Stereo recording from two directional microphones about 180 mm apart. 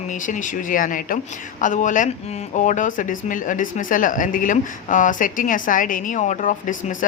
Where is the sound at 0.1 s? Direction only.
45° left (ahead or behind).